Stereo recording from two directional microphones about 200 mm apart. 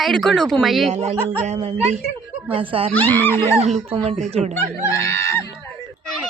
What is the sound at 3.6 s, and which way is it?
Speech, 30° right (ahead or behind).